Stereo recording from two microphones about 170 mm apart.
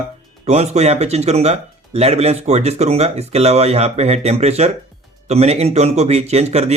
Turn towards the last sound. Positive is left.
turn(degrees=-40)  # may be behind; listen again after turning